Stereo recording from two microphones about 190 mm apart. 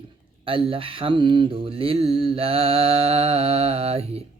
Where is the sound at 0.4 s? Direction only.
30° right (ahead or behind).